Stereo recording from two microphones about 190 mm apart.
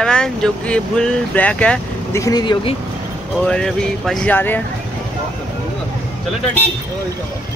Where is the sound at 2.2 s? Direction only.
20° left (ahead or behind).